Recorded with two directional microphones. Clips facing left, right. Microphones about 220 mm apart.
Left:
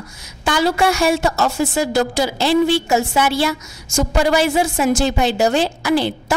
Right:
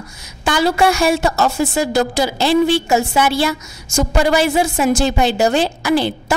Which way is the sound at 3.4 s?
15° right (ahead or behind).